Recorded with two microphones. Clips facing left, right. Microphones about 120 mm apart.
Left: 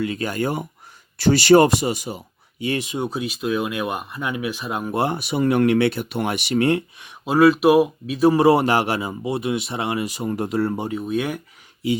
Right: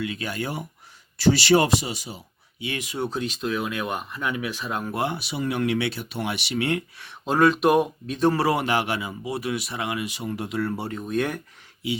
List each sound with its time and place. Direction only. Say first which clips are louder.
0.0 s speech: left 6 dB; 40° left (ahead or behind)
2.7 s speech: left 5 dB; 25° left (ahead or behind)
3.0 s speech: left 2 dB; 10° left (ahead or behind)
4.9 s speech: left 9 dB; 45° left (ahead or behind)
7.3 s speech: left 4 dB; 5° left (ahead or behind)
8.4 s speech: left 7 dB; 30° left (ahead or behind)
10.7 s speech: left 4 dB; 15° left (ahead or behind)
11.0 s speech: even; 5° left (ahead or behind)